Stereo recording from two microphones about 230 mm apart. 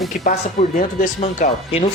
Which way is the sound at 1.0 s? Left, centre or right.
Left.